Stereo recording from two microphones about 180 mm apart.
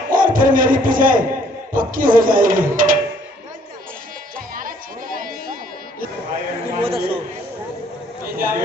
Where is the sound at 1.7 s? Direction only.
50° right (ahead or behind).